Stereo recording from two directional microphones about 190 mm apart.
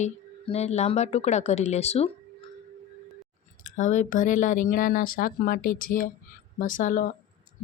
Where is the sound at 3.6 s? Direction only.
40° left (ahead or behind).